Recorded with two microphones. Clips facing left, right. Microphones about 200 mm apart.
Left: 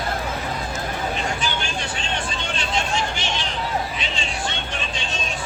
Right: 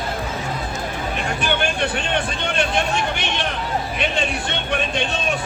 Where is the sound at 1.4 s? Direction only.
60° right (ahead or behind).